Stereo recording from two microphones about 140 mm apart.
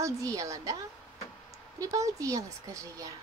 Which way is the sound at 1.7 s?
25° right (ahead or behind).